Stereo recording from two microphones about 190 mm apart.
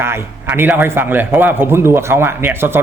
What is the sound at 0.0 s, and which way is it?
A man's voice, 10° right (ahead or behind).